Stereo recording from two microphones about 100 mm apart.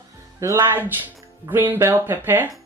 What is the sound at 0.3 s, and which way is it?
Speech, 30° right (ahead or behind).